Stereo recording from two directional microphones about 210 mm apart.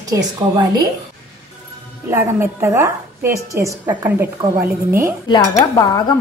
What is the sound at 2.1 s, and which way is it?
A woman's voice, 10° right (ahead or behind).